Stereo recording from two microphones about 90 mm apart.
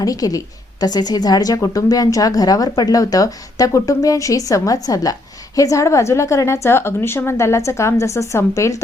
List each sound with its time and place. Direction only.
0.0 s a woman's voice: 45° left (ahead or behind)